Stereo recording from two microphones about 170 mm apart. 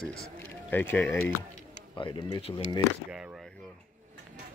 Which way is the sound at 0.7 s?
10° left (ahead or behind).